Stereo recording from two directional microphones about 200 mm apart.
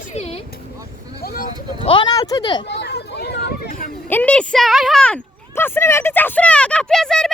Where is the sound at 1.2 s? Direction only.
50° left (ahead or behind).